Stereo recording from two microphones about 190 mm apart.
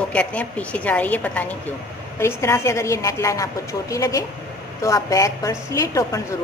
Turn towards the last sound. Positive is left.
turn(degrees=15)  # may be behind; listen again after turning